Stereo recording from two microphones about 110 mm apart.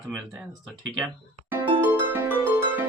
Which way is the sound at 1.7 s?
15° right (ahead or behind).